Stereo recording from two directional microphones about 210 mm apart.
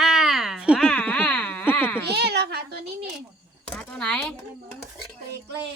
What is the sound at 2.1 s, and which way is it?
Speech, 50° right (ahead or behind).